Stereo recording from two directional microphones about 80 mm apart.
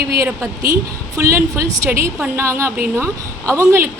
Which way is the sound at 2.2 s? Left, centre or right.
Right.